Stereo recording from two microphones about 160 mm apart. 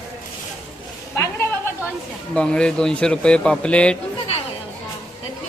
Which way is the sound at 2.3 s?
5° left (ahead or behind).